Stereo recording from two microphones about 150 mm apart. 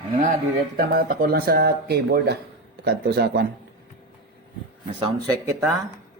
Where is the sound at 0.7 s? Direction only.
70° right (ahead or behind); by 3.5 s 90° right.